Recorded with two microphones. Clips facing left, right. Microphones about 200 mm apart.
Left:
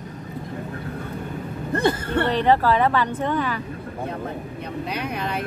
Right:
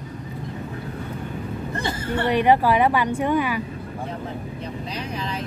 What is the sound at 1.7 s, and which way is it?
Speech, 60° left (ahead or behind).